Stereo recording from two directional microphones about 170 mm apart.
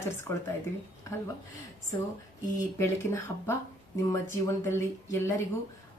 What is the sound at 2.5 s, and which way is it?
A woman's voice, 15° left (ahead or behind).